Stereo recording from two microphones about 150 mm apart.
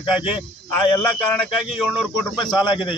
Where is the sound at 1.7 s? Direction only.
5° right (ahead or behind).